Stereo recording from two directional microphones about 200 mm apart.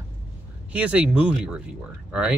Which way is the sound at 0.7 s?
5° right (ahead or behind).